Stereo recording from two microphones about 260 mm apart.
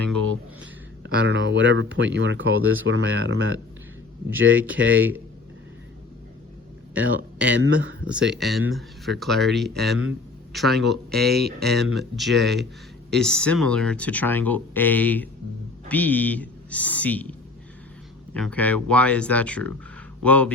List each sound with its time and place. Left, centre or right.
0.6 s speech: right
7.2 s speech: right
8.3 s speech: centre
9.9 s speech: right
10.5 s speech: centre
11.3 s speech: right
11.9 s speech: centre
18.3 s speech: centre